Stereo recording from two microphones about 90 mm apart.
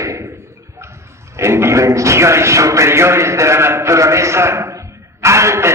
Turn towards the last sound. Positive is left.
turn(degrees=-30)  # may be behind; listen again after turning